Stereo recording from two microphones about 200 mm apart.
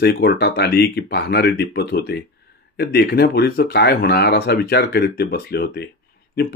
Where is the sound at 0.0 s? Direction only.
55° left (ahead or behind).